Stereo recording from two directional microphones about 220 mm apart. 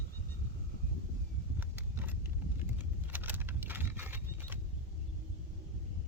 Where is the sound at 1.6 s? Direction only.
10° right (ahead or behind).